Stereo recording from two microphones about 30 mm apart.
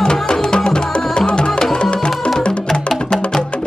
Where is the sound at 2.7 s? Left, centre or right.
Centre.